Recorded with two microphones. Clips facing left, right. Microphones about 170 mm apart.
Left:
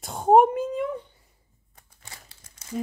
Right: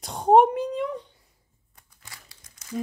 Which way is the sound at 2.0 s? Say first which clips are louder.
Left 2 dB; 25° left (ahead or behind).